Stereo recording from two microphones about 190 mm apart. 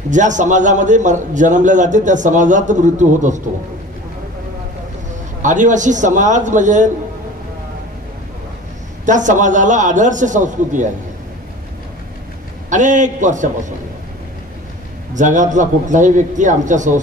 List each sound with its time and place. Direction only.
0.1 s a man's voice: 40° right (ahead or behind)
5.4 s a man's voice: 40° right (ahead or behind)
9.0 s a man's voice: 40° right (ahead or behind)
12.6 s a man's voice: 40° right (ahead or behind)
15.1 s a man's voice: 40° right (ahead or behind)